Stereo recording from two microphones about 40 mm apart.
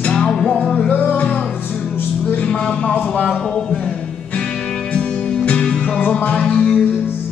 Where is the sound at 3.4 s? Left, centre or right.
Left.